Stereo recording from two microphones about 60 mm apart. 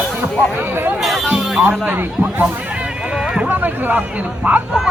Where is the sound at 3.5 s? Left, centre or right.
Right.